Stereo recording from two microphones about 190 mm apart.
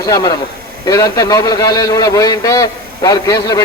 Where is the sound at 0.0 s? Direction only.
20° left (ahead or behind).